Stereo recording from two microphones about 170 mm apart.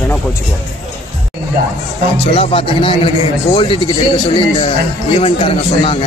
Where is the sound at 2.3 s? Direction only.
35° left (ahead or behind).